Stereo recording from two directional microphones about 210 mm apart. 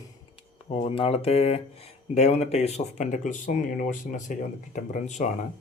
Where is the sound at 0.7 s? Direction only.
30° left (ahead or behind).